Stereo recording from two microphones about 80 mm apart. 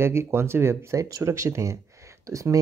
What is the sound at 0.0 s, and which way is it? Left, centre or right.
Speech, right.